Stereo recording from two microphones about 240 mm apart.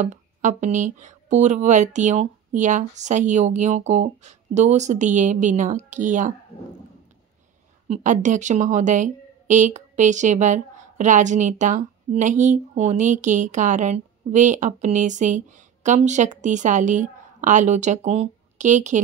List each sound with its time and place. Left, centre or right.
0.0 s a woman's voice: right
7.9 s a woman's voice: right